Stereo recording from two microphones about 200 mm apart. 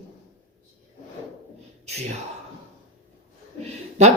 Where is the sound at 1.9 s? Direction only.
35° right (ahead or behind).